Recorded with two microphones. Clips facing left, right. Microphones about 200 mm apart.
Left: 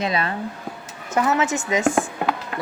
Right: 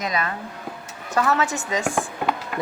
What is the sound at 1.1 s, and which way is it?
Speech, 20° left (ahead or behind).